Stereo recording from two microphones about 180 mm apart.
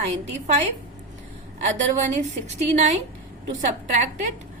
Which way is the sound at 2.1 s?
40° right (ahead or behind).